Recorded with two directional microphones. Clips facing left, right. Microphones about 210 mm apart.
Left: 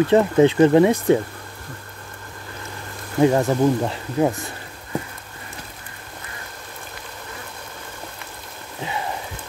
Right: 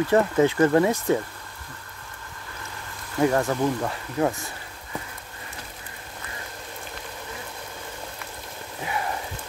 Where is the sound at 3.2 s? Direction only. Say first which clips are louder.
Left 5 dB; 20° left (ahead or behind).